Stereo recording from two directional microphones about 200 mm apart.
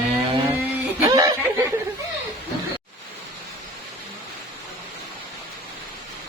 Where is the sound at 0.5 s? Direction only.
15° right (ahead or behind).